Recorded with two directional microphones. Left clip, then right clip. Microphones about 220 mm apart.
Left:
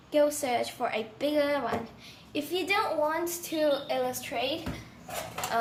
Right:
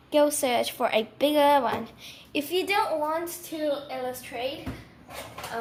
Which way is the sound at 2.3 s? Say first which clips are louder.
Right 3 dB; 25° right (ahead or behind).